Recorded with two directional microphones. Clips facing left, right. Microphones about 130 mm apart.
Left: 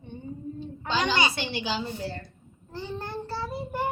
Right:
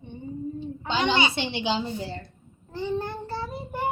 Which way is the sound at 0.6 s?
20° right (ahead or behind).